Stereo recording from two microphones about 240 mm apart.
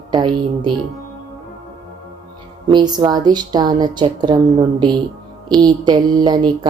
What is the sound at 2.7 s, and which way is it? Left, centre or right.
Music, centre.